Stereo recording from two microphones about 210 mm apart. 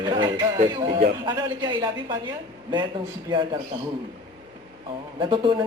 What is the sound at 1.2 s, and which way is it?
Speech, 20° right (ahead or behind).